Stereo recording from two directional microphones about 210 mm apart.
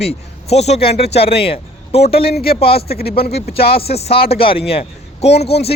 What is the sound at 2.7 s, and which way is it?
Speech, 50° left (ahead or behind).